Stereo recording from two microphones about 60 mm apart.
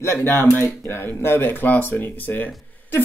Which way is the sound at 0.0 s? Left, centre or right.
Left.